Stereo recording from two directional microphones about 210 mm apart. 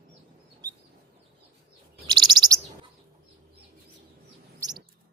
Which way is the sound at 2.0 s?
20° right (ahead or behind).